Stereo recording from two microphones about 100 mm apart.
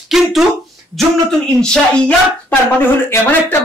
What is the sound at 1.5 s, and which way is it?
Speech, 5° left (ahead or behind).